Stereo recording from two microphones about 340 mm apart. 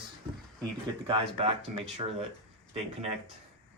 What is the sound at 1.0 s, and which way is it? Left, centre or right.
Speech, centre.